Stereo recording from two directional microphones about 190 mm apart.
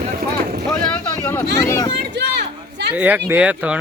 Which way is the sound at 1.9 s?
60° right (ahead or behind).